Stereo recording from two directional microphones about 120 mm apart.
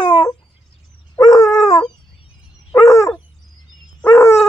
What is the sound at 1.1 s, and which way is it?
Dog, 30° left (ahead or behind).